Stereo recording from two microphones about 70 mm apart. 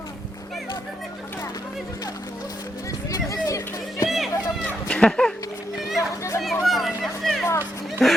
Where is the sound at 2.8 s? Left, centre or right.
Left.